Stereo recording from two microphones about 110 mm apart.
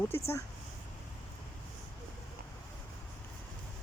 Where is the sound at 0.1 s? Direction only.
20° left (ahead or behind).